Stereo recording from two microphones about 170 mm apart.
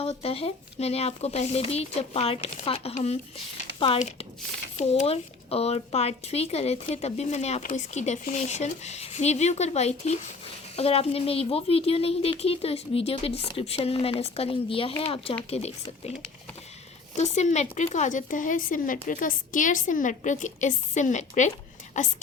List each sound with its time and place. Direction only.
0.0 s speech: 35° left (ahead or behind)
17.2 s a woman's voice: 45° left (ahead or behind)